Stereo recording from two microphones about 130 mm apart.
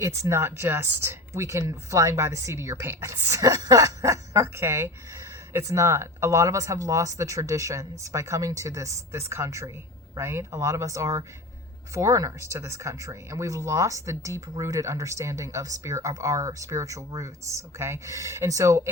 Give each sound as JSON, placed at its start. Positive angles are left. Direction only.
{"t": 0.0, "sound": "speech", "side_deg": -20}